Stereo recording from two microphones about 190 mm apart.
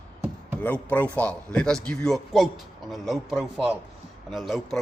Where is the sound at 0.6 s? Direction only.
10° left (ahead or behind).